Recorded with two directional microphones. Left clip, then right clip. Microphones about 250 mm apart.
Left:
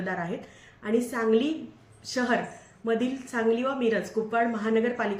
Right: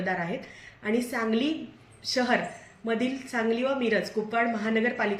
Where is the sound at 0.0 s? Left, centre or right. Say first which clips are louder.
Right 2 dB; centre.